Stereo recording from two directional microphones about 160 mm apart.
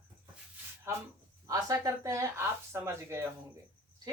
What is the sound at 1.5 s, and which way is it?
Speech, 20° right (ahead or behind).